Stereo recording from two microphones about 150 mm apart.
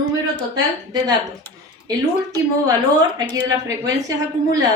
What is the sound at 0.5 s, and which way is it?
Speech, 25° right (ahead or behind).